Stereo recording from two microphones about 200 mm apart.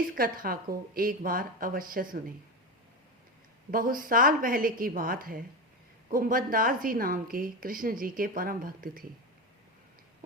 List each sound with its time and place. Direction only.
0.2 s a woman's voice: 45° right (ahead or behind)
3.7 s a woman's voice: 45° right (ahead or behind)